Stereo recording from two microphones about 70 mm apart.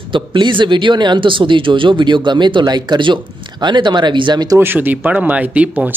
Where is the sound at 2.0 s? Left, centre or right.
Right.